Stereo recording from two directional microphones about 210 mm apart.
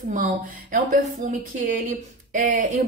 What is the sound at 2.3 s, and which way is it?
Speech, 40° right (ahead or behind).